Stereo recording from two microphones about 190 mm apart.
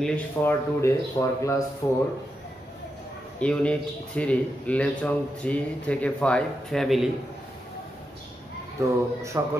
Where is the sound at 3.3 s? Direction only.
5° left (ahead or behind).